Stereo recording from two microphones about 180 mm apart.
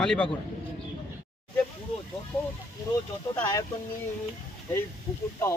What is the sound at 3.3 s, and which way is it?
Speech, 15° left (ahead or behind).